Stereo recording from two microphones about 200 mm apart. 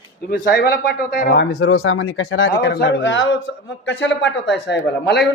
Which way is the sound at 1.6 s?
90° left.